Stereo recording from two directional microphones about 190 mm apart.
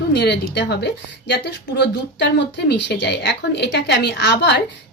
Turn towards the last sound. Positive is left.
turn(degrees=65)  # may be behind; listen again after turning